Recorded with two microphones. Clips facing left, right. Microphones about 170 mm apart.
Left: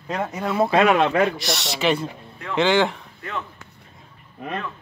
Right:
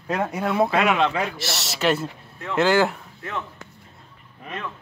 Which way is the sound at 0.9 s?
50° left (ahead or behind).